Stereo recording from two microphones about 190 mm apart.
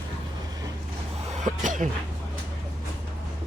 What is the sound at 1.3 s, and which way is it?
Speech, 40° right (ahead or behind).